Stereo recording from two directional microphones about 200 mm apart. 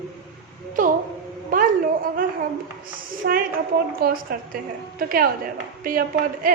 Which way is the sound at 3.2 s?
55° right (ahead or behind).